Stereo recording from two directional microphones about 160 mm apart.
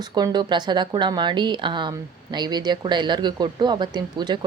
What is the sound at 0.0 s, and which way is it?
Speech, 25° right (ahead or behind).